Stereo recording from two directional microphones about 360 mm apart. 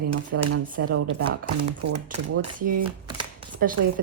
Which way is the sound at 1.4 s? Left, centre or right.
Right.